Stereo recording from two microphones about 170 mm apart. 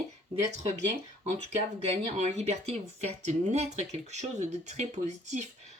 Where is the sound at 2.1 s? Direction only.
40° right (ahead or behind).